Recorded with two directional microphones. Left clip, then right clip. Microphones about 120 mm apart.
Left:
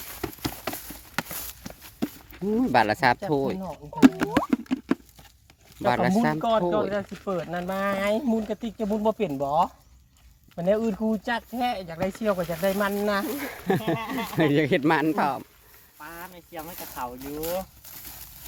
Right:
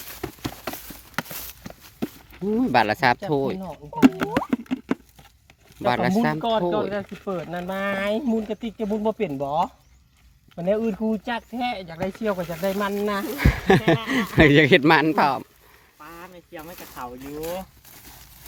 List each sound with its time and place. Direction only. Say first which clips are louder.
0.2 s clip-clop: left 1 dB; 20° right (ahead or behind)
0.7 s clip-clop: right 1 dB; 5° right (ahead or behind)
1.1 s walk: right 1 dB; 10° right (ahead or behind)
2.0 s a sound: even; 20° right (ahead or behind)
2.6 s speech: right 2 dB; 15° right (ahead or behind)
4.0 s plop: even; 25° right (ahead or behind)
5.8 s speech: right 1 dB; 10° right (ahead or behind)
6.4 s speech: right 1 dB; 10° left (ahead or behind)
8.4 s speech: right 2 dB; 20° left (ahead or behind)
13.4 s speech: right 8 dB; 60° right (ahead or behind); by 15.4 s 45° right (ahead or behind)
16.0 s snake: left 1 dB; 90° left; by 16.7 s 75° left (ahead or behind)
16.8 s speech: left 3 dB; 40° left (ahead or behind)
17.2 s speech: even; 20° left (ahead or behind)